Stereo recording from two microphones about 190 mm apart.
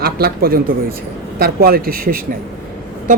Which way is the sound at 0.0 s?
55° right (ahead or behind).